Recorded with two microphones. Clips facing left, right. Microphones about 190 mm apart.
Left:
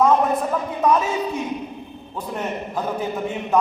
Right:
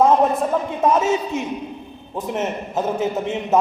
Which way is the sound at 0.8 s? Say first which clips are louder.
Right 1 dB; 25° right (ahead or behind).